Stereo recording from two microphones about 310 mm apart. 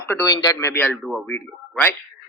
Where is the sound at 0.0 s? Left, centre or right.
Centre.